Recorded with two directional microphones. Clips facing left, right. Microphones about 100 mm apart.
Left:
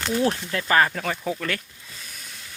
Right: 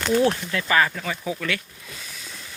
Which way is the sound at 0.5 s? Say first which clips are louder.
Left 1 dB; 35° left (ahead or behind).